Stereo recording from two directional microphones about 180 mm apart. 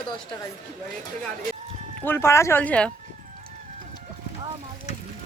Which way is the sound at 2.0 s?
15° left (ahead or behind).